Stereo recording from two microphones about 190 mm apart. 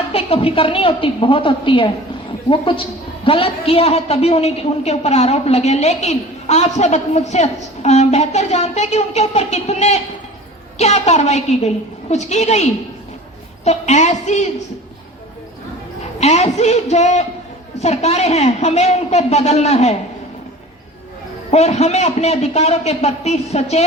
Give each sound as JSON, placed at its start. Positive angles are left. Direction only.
{"t": 0.1, "sound": "a woman's voice", "side_deg": 30}
{"t": 13.7, "sound": "a woman's voice", "side_deg": 40}
{"t": 16.2, "sound": "a woman's voice", "side_deg": 35}
{"t": 21.5, "sound": "a woman's voice", "side_deg": 35}